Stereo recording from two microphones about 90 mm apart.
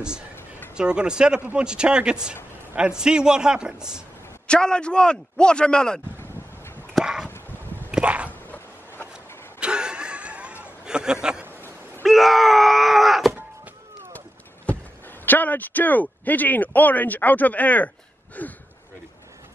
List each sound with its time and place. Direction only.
0.7 s speech: 10° right (ahead or behind)
4.5 s a man's voice: 10° left (ahead or behind)
6.9 s dog: 5° right (ahead or behind)
7.9 s dog: 15° right (ahead or behind)
8.3 s a sound: 20° left (ahead or behind)
9.6 s snicker: 10° right (ahead or behind)
12.0 s wail: centre (ahead or behind)
14.7 s a sound: 15° left (ahead or behind)
15.2 s speech: 20° left (ahead or behind)